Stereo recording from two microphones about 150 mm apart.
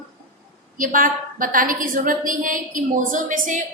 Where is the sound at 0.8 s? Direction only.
65° right (ahead or behind).